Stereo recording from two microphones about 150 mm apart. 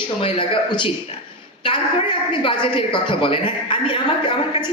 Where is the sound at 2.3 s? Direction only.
35° left (ahead or behind).